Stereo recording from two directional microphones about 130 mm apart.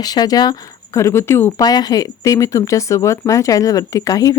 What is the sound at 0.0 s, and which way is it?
Speech, 30° left (ahead or behind).